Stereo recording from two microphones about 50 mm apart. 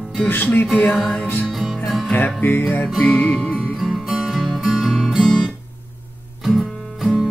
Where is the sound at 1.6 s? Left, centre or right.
Centre.